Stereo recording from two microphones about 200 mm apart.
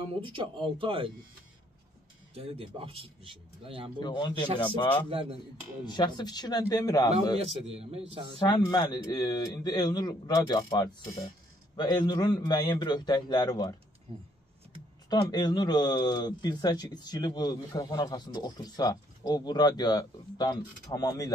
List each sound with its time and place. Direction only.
0.1 s speech: 25° right (ahead or behind)
2.3 s speech: 30° right (ahead or behind)
4.0 s speech: 20° left (ahead or behind)
5.9 s speech: 20° left (ahead or behind)
7.3 s a man's voice: 30° right (ahead or behind)
8.4 s speech: 20° left (ahead or behind)
15.0 s speech: 20° left (ahead or behind)